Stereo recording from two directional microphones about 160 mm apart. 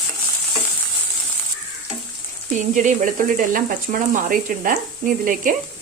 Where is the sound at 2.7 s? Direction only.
50° right (ahead or behind).